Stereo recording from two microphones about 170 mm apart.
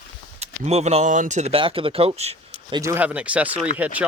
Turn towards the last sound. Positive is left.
turn(degrees=-10)  # may be behind; listen again after turning